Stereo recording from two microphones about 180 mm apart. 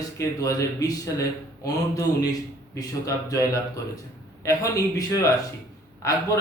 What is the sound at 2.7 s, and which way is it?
Speech, 20° left (ahead or behind).